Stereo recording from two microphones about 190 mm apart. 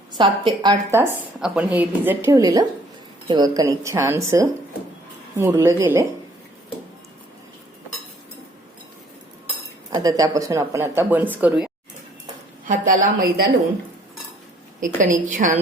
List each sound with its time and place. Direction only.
0.1 s a woman's voice: 25° right (ahead or behind)
9.9 s a woman's voice: 20° right (ahead or behind)
12.6 s a woman's voice: 45° right (ahead or behind)
14.8 s a woman's voice: 40° right (ahead or behind)